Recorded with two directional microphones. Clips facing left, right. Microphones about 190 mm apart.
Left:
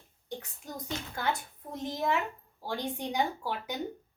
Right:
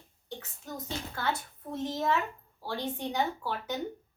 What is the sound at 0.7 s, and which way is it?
A woman's voice, 15° left (ahead or behind).